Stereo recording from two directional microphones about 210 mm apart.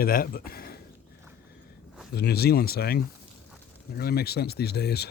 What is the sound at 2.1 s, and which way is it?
Speech, 50° left (ahead or behind).